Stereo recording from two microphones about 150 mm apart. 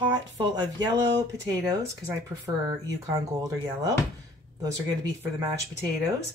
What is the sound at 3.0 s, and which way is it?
Speech, 25° right (ahead or behind).